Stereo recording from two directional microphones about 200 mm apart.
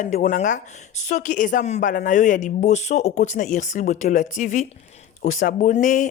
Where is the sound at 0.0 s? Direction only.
40° left (ahead or behind).